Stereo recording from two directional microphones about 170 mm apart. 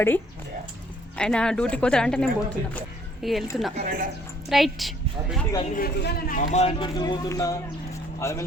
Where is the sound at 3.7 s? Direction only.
50° right (ahead or behind).